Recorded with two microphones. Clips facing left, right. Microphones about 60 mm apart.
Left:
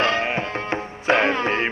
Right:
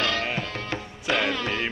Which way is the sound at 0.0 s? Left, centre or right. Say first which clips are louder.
Left 5 dB; left.